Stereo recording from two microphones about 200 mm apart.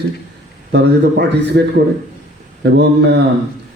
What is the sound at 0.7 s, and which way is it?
Speech, 55° right (ahead or behind).